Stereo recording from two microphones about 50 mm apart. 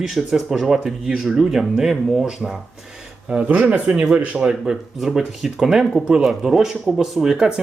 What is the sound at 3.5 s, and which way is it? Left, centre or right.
Speech, right.